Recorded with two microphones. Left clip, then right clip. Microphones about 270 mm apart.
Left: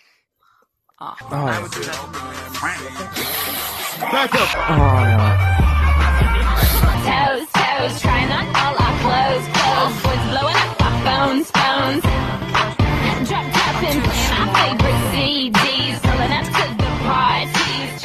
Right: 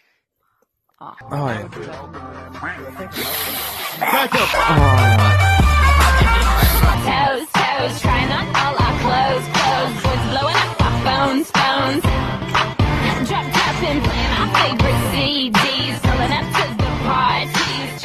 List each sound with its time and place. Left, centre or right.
3.2 s a sound: centre
4.6 s music: centre
6.9 s music: centre